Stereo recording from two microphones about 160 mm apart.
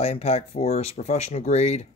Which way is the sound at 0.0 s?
40° left (ahead or behind).